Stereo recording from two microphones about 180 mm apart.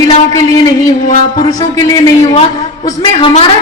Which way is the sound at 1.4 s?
20° left (ahead or behind).